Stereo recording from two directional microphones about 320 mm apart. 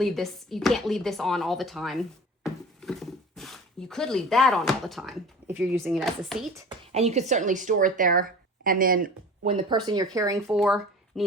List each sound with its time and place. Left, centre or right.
0.0 s speech: centre
2.4 s a sound: centre
5.5 s speech: centre
6.7 s speech: centre